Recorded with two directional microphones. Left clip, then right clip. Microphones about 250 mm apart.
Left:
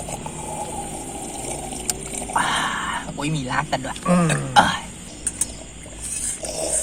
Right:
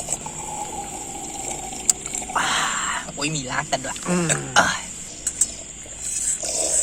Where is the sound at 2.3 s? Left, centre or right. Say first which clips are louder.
Left 1 dB; right.